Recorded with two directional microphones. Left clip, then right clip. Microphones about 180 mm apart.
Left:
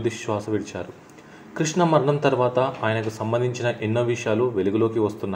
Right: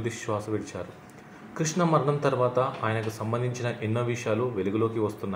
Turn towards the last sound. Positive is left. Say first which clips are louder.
# left 5 dB
turn(degrees=30)  # may be behind; listen again after turning